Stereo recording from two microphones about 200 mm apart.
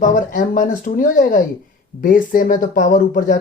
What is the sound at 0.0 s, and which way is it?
Speech, 40° left (ahead or behind).